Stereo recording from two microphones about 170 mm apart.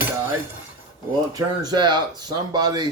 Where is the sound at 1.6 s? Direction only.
25° right (ahead or behind).